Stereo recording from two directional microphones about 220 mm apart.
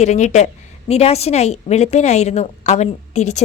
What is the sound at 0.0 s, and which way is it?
A woman's voice, 30° left (ahead or behind).